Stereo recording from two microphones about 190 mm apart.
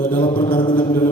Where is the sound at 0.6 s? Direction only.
25° left (ahead or behind).